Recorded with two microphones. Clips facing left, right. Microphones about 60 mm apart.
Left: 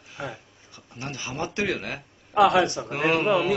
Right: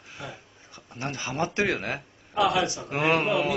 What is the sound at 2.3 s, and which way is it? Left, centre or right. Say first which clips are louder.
Speech: left 5 dB; left.